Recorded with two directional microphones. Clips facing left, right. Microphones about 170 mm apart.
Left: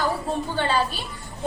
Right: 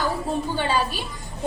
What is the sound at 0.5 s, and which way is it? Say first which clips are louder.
Speech: left 2 dB; 15° right (ahead or behind).